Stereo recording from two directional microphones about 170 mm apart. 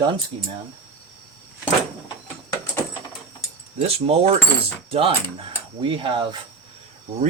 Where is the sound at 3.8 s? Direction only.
35° right (ahead or behind).